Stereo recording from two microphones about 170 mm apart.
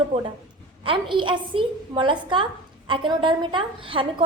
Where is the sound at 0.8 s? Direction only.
30° right (ahead or behind).